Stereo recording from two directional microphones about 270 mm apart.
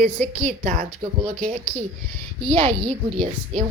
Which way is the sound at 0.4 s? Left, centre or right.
Right.